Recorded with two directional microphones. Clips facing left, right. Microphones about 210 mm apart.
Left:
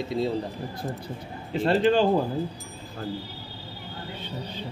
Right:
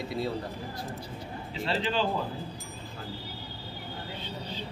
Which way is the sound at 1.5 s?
50° left (ahead or behind).